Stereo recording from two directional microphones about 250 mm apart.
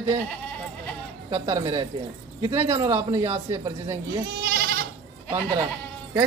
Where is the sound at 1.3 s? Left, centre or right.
Centre.